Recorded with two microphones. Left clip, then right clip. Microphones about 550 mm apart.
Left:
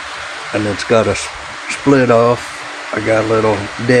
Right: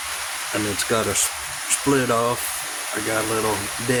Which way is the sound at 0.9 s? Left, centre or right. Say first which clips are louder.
Left 11 dB; right.